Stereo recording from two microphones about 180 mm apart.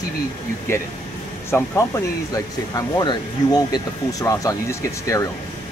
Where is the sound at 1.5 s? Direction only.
10° left (ahead or behind).